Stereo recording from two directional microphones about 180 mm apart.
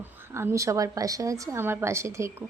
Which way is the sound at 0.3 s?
15° right (ahead or behind).